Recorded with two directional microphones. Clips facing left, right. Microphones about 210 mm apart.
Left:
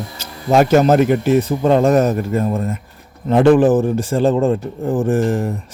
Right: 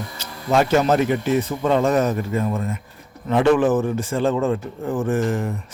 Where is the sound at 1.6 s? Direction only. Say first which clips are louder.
Left 4 dB; 40° left (ahead or behind).